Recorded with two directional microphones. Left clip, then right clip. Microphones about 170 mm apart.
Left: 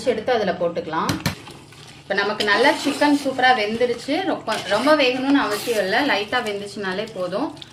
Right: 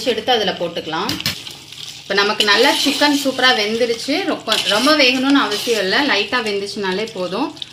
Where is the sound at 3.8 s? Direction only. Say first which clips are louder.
Right 3 dB; 45° right (ahead or behind).